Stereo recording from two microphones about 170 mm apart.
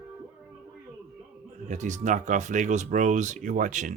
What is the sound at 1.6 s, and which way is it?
Speech, 45° right (ahead or behind).